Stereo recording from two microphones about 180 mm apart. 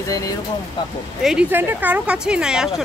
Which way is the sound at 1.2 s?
5° right (ahead or behind).